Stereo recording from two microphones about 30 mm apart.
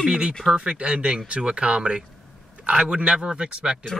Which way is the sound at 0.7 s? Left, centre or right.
Right.